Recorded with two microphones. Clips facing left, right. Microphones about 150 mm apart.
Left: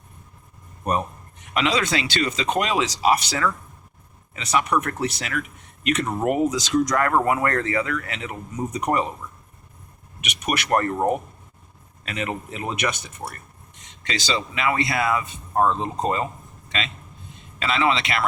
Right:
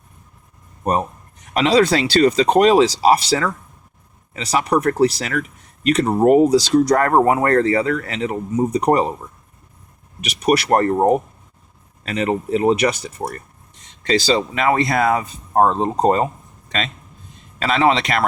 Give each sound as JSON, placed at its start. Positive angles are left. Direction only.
{"t": 1.5, "sound": "speech", "side_deg": -35}
{"t": 10.2, "sound": "speech", "side_deg": -35}